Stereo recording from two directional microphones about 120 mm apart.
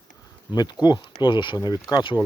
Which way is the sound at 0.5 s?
35° left (ahead or behind).